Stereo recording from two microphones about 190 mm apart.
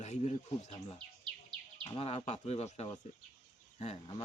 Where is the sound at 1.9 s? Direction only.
30° left (ahead or behind).